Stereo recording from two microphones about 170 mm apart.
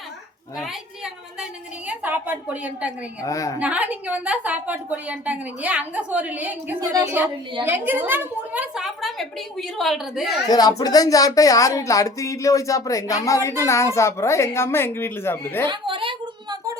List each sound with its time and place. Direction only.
0.5 s a woman's voice: centre (ahead or behind)
1.9 s a woman's voice: 10° right (ahead or behind)
3.2 s speech: 20° left (ahead or behind)
3.6 s a woman's voice: 10° right (ahead or behind)
10.5 s speech: 20° left (ahead or behind)
15.7 s a sound: 30° right (ahead or behind)